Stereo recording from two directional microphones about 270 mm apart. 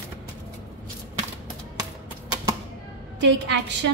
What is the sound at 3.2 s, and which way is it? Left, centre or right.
Speech, right.